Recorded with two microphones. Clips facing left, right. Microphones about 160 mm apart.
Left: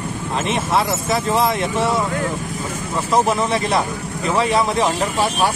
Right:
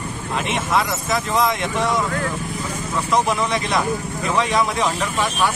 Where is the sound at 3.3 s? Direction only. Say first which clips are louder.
Left 2 dB; 35° left (ahead or behind).